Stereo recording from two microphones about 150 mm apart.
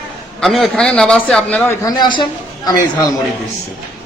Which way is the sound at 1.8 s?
30° left (ahead or behind).